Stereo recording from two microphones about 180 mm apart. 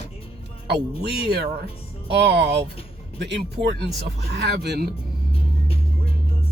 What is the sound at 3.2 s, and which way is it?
Speech, 75° right (ahead or behind).